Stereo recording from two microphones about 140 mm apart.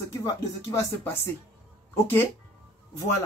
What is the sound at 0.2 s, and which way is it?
Speech, 20° left (ahead or behind).